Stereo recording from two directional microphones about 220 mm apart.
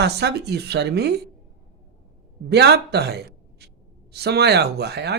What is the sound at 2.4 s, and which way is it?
A man's voice, 45° right (ahead or behind).